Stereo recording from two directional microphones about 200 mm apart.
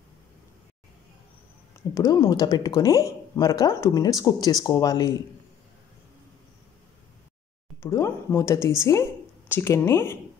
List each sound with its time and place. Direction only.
2.0 s speech: 15° left (ahead or behind)
7.8 s a woman's voice: 15° left (ahead or behind)